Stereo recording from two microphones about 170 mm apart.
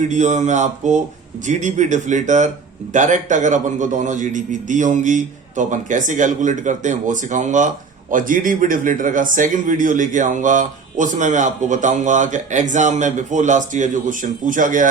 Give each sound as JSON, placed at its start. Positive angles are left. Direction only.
{"t": 0.0, "sound": "speech", "side_deg": -45}